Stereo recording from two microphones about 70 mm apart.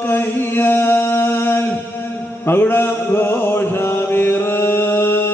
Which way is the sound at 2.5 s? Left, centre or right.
Left.